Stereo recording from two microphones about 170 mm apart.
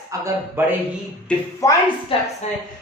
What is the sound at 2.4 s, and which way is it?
Speech, 40° left (ahead or behind).